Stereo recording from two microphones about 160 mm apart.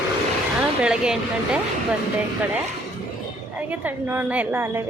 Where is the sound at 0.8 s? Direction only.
5° right (ahead or behind).